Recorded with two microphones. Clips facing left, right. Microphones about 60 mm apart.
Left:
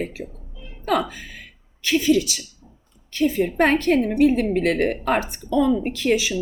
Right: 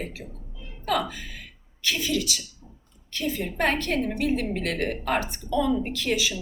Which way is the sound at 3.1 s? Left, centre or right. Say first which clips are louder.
Left 9 dB; left.